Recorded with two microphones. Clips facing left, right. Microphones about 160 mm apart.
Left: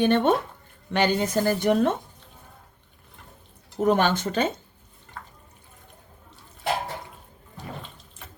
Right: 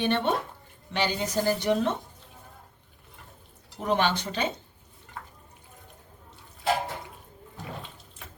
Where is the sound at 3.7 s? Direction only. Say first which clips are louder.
Left 5 dB; 45° left (ahead or behind).